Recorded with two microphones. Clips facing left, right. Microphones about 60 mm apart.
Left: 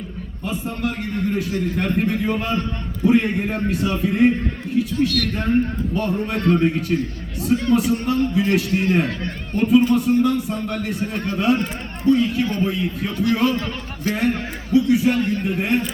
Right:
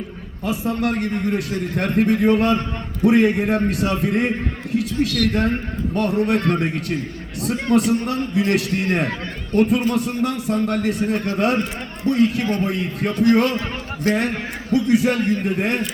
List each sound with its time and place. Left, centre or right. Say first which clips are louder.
0.4 s a man's voice: right 4 dB; right